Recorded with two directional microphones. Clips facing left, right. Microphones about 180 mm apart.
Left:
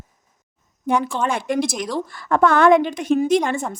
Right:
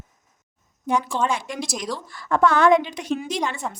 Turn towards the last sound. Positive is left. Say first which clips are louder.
# left 9 dB
turn(degrees=50)  # may be behind; listen again after turning